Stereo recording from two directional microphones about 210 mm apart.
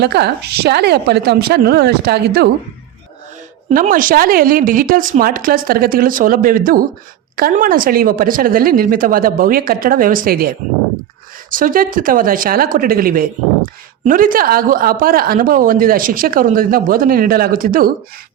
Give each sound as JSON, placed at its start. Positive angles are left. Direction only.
{"t": 0.0, "sound": "speech", "side_deg": -50}
{"t": 3.7, "sound": "a woman's voice", "side_deg": -40}
{"t": 11.5, "sound": "a woman's voice", "side_deg": -40}